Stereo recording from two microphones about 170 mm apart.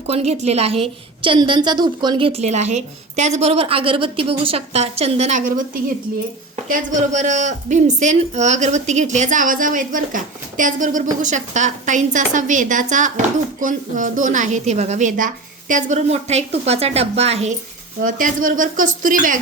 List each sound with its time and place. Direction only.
0.1 s a woman's voice: 40° right (ahead or behind)
18.0 s a woman's voice: 50° right (ahead or behind)